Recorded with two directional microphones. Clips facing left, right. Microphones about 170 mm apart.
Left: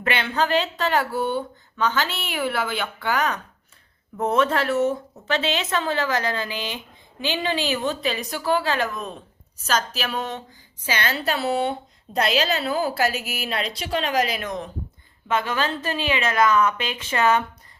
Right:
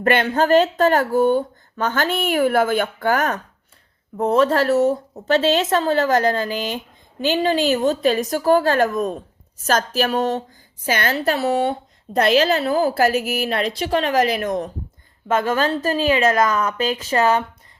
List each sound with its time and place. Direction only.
0.0 s a woman's voice: 45° right (ahead or behind)
4.2 s a woman's voice: 35° right (ahead or behind)